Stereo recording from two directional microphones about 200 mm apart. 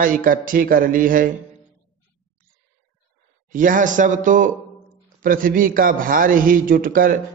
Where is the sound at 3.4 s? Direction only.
40° right (ahead or behind).